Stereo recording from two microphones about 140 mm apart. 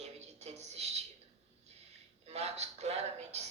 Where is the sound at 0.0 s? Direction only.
50° right (ahead or behind).